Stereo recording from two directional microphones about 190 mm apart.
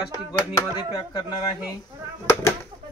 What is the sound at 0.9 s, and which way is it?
Speech, 20° left (ahead or behind).